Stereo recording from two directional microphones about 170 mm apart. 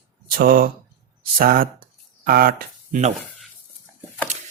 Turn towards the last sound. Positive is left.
turn(degrees=-60)  # may be behind; listen again after turning